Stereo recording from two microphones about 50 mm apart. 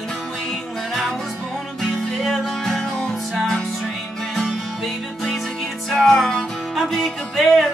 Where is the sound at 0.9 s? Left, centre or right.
Centre.